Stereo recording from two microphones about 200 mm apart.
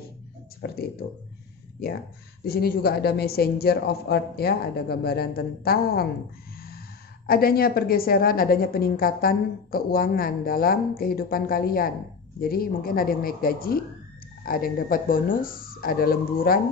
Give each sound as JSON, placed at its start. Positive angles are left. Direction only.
{"t": 0.6, "sound": "a woman's voice", "side_deg": 50}
{"t": 2.4, "sound": "a woman's voice", "side_deg": 50}
{"t": 7.2, "sound": "a woman's voice", "side_deg": 50}